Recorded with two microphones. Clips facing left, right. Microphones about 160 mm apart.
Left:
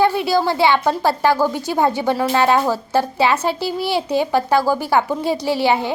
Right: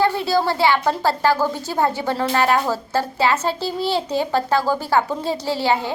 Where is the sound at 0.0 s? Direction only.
15° left (ahead or behind).